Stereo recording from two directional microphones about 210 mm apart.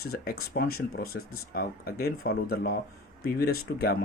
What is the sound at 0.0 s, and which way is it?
Speech, 45° left (ahead or behind).